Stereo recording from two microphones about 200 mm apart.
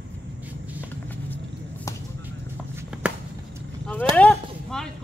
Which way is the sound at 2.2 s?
10° right (ahead or behind).